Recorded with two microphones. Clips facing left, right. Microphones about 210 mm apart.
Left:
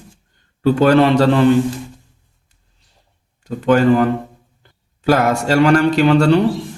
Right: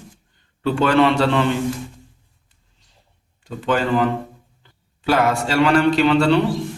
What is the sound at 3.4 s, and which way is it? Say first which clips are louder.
A man's voice: left 7 dB; 45° left (ahead or behind).